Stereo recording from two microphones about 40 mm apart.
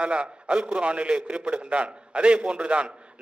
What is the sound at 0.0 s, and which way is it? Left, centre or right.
A man's voice, right.